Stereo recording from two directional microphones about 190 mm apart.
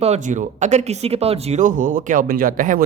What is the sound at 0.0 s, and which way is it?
Speech, 40° right (ahead or behind).